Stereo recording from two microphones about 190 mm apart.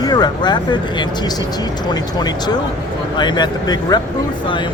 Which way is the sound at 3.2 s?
25° left (ahead or behind).